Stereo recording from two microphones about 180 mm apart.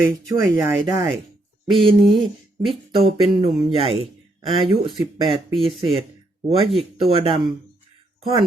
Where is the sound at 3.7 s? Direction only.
30° right (ahead or behind).